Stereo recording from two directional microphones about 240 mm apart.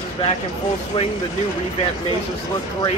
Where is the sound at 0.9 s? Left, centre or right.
Left.